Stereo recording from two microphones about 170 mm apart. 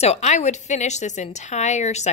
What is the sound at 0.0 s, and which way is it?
Speech, 40° left (ahead or behind).